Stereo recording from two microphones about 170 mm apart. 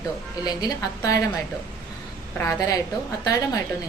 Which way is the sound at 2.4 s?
20° left (ahead or behind).